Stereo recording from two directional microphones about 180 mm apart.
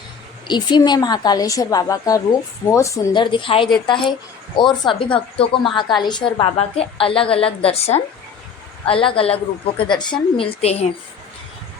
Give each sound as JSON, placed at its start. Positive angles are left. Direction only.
{"t": 0.4, "sound": "a woman's voice", "side_deg": 25}